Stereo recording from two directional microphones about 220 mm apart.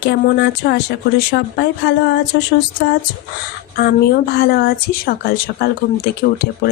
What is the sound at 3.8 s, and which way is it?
Speech, 45° left (ahead or behind).